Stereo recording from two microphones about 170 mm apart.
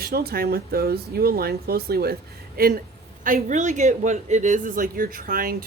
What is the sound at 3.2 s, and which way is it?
Speech, 50° right (ahead or behind).